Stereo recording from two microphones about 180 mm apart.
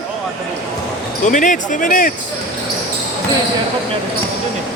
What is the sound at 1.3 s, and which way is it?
Speech, 45° left (ahead or behind).